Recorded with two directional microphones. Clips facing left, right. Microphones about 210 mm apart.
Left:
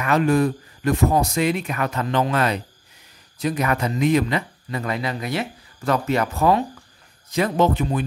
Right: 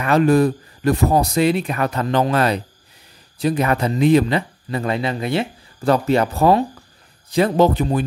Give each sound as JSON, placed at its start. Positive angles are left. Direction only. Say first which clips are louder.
{"t": 0.0, "sound": "speech", "louder": "right 4 dB", "side_deg": -35}